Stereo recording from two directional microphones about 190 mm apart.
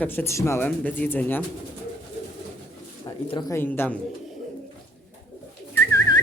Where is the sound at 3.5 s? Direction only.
10° left (ahead or behind).